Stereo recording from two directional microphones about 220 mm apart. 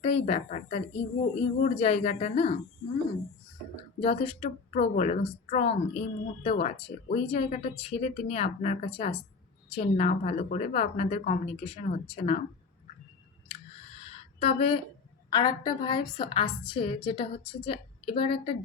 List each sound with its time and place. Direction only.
0.0 s a woman's voice: 25° left (ahead or behind)
4.0 s a woman's voice: 25° left (ahead or behind)
14.3 s a woman's voice: 30° left (ahead or behind)
15.3 s a woman's voice: 15° left (ahead or behind)